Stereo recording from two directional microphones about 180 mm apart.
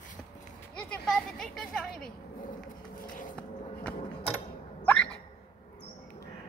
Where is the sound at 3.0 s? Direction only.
50° left (ahead or behind).